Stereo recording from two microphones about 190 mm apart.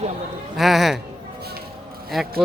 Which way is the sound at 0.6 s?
Centre (ahead or behind).